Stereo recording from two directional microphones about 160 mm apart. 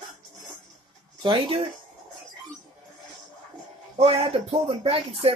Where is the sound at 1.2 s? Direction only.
30° right (ahead or behind).